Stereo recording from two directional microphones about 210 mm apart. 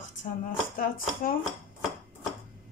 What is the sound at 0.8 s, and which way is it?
Speech, 40° left (ahead or behind).